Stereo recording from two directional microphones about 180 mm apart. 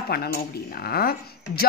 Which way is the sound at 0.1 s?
60° left (ahead or behind).